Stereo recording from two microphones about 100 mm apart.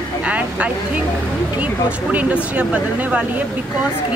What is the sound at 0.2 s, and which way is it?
Speech, 15° right (ahead or behind).